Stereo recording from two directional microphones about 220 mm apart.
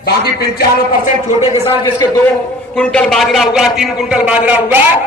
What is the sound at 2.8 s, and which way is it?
A man's voice, 5° left (ahead or behind).